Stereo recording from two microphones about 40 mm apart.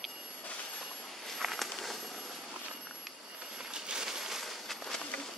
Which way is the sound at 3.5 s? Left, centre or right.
Centre.